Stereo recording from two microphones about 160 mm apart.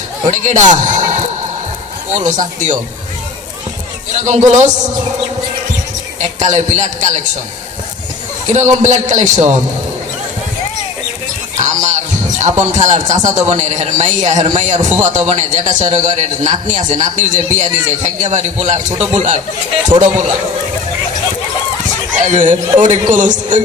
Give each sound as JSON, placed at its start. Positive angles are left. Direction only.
{"t": 0.3, "sound": "a man's voice", "side_deg": -50}
{"t": 4.3, "sound": "a man's voice", "side_deg": -45}
{"t": 6.1, "sound": "a man's voice", "side_deg": -45}
{"t": 8.5, "sound": "a man's voice", "side_deg": -45}
{"t": 11.6, "sound": "music", "side_deg": -50}
{"t": 12.4, "sound": "a man's voice", "side_deg": -45}
{"t": 22.2, "sound": "a man's voice", "side_deg": -50}